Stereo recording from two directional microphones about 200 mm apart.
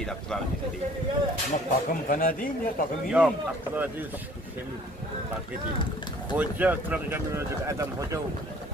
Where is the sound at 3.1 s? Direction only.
5° right (ahead or behind).